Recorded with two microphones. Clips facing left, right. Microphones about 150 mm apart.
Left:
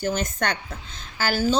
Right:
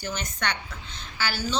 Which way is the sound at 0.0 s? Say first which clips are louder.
Left 6 dB; 50° left (ahead or behind).